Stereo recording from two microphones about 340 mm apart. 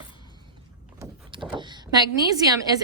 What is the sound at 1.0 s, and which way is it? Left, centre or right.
Vehicle, centre.